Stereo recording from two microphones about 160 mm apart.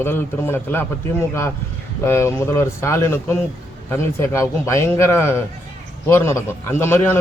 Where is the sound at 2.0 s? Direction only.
15° left (ahead or behind).